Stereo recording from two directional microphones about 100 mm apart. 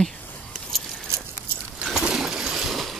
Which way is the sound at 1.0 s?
25° right (ahead or behind).